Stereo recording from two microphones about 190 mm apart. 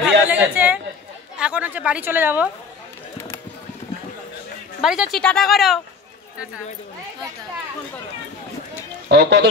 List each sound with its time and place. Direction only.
0.0 s a man's voice: 10° right (ahead or behind)
4.8 s speech: centre (ahead or behind)
9.1 s speech: 60° right (ahead or behind)